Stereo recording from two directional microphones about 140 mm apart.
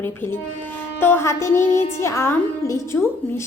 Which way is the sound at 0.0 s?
15° left (ahead or behind).